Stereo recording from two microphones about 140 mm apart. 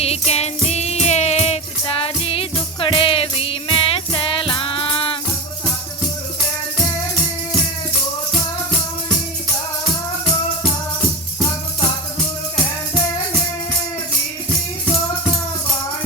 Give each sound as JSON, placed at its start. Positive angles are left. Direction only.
{"t": 0.0, "sound": "music", "side_deg": 50}